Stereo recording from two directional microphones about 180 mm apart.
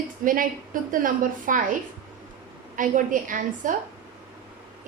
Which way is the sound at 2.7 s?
45° right (ahead or behind).